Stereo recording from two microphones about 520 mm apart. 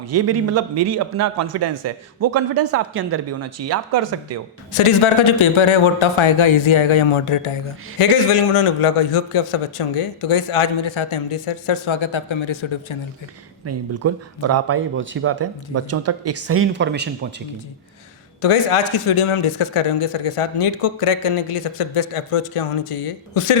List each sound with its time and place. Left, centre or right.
0.0 s a man's voice: right
4.7 s a man's voice: left
13.7 s a man's voice: right
18.4 s speech: left